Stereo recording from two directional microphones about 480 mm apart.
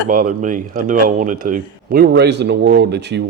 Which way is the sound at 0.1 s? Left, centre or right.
Centre.